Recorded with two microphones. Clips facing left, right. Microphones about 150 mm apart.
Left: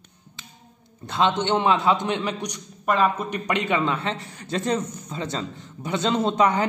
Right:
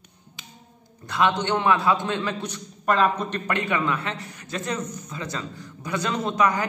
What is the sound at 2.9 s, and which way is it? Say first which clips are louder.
A man's voice: even; 5° left (ahead or behind).